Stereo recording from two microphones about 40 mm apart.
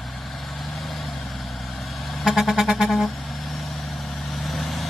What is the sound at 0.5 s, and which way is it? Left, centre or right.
Vehicle, centre.